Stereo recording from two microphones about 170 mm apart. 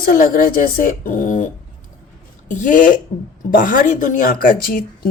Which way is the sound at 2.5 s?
50° left (ahead or behind).